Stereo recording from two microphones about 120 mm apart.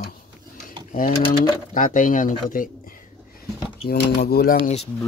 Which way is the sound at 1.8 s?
90° left.